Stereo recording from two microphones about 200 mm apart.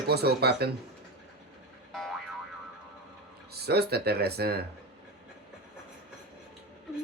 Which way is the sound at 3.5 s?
55° right (ahead or behind).